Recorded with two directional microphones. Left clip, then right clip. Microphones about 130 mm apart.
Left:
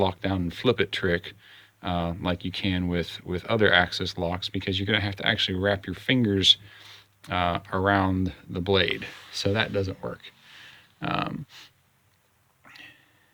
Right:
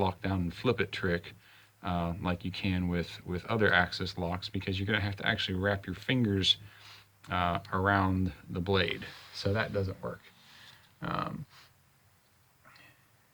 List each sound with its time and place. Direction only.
0.0 s speech: 30° left (ahead or behind)
9.0 s speech: 55° left (ahead or behind); by 10.3 s 75° left (ahead or behind)
11.0 s speech: 60° left (ahead or behind)
12.6 s a sound: 90° left